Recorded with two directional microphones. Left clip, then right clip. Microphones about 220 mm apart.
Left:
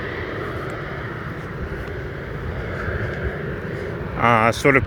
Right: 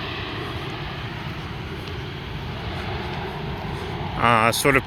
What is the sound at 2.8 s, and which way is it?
Vehicle, 30° right (ahead or behind).